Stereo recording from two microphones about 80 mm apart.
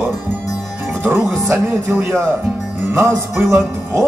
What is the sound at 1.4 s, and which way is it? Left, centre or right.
Speech, right.